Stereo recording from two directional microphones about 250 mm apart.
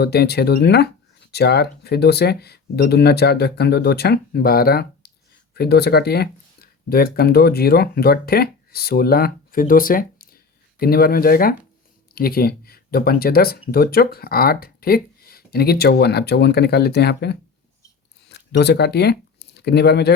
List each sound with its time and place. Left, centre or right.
0.0 s speech: left